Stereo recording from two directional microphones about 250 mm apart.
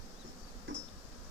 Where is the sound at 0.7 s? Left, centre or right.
Right.